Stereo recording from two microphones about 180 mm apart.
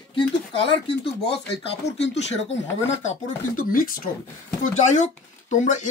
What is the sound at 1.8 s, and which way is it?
Speech, 35° left (ahead or behind).